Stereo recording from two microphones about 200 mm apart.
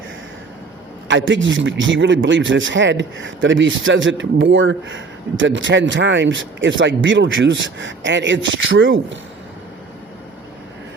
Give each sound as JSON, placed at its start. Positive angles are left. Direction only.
{"t": 1.0, "sound": "a man's voice", "side_deg": -65}